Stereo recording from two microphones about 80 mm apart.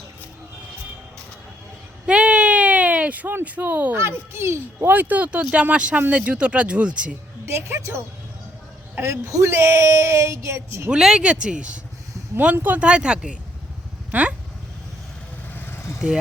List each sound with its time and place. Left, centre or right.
2.0 s a sound: centre
3.9 s speech: right; by 7.2 s centre
7.4 s speech: right
10.9 s speech: centre
15.5 s vehicle: left